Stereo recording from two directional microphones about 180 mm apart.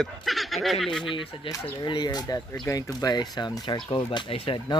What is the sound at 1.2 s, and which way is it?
Speech, 25° left (ahead or behind).